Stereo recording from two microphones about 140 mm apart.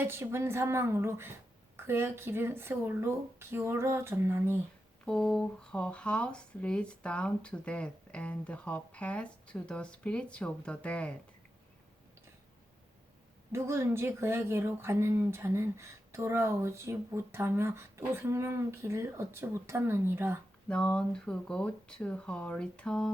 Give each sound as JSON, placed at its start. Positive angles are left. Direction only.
{"t": 0.0, "sound": "speech", "side_deg": -15}
{"t": 5.0, "sound": "speech", "side_deg": 5}
{"t": 13.5, "sound": "speech", "side_deg": -20}
{"t": 20.7, "sound": "speech", "side_deg": 5}